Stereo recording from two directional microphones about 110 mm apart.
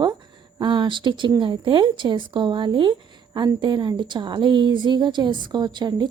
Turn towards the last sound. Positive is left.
turn(degrees=-40)  # may be behind; listen again after turning